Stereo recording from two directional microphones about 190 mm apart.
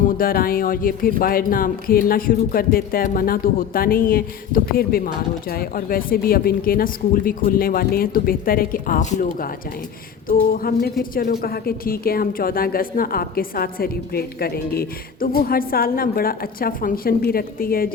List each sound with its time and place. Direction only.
0.2 s a woman's voice: 50° left (ahead or behind)